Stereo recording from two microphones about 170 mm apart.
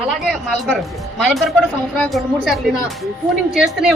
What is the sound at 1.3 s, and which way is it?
A woman's voice, centre (ahead or behind).